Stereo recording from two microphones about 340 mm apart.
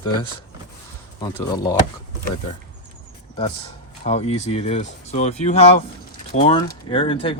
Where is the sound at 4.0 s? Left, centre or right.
Centre.